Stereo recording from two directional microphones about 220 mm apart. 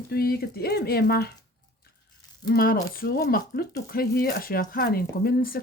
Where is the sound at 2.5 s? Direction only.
40° left (ahead or behind).